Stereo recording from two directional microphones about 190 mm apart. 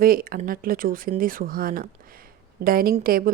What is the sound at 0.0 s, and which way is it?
A woman's voice, 50° right (ahead or behind).